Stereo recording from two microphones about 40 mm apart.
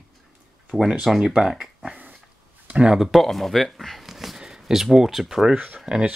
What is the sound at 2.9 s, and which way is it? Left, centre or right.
Speech, centre.